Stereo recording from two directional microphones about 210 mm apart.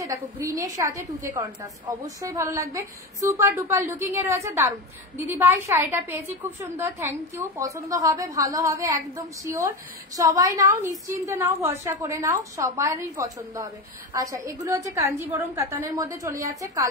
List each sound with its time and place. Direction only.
0.0 s a woman's voice: 15° right (ahead or behind)